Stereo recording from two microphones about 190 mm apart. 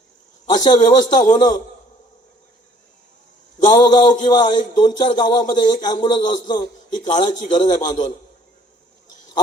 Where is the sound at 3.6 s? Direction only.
20° left (ahead or behind).